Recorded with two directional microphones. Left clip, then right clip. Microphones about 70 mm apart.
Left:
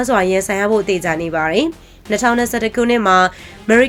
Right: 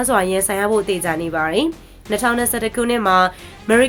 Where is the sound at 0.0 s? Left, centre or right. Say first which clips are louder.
Left 2 dB; centre.